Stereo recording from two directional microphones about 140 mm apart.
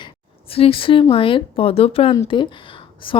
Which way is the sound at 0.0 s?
40° left (ahead or behind).